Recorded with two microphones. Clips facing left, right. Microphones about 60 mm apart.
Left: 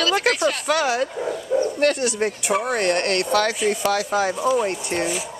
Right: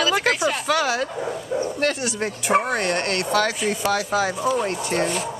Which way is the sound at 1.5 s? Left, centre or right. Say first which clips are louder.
Left 5 dB; centre.